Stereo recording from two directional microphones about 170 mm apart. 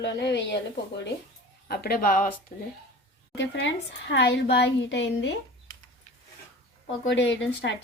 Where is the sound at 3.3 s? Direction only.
90° left.